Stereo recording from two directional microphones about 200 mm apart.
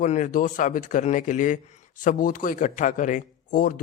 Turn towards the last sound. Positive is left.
turn(degrees=40)  # may be behind; listen again after turning